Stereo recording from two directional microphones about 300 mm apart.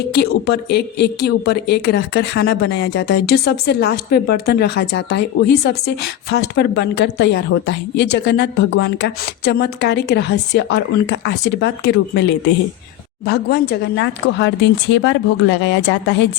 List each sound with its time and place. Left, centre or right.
0.1 s a woman's voice: left